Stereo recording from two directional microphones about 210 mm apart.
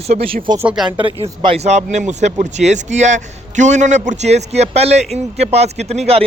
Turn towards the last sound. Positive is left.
turn(degrees=-30)  # may be behind; listen again after turning